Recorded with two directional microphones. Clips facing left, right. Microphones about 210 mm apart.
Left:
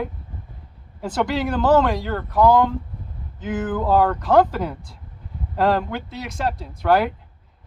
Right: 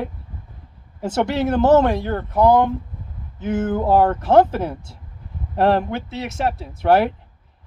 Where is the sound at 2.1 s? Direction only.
25° right (ahead or behind).